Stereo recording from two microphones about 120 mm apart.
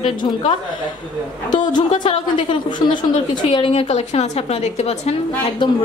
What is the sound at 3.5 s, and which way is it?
Speech, 50° left (ahead or behind).